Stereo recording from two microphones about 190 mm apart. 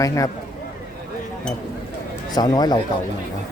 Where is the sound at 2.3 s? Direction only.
20° left (ahead or behind).